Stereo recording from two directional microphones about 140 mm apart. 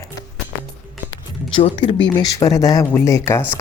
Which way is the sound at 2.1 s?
25° left (ahead or behind).